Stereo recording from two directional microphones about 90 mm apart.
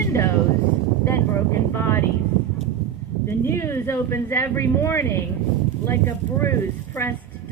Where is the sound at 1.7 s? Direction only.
30° left (ahead or behind).